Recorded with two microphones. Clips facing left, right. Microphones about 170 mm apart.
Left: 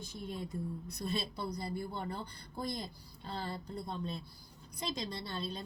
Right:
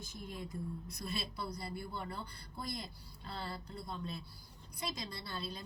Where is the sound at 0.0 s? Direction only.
30° left (ahead or behind).